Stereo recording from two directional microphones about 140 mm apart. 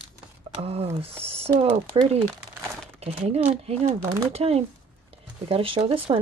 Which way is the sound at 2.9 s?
50° right (ahead or behind).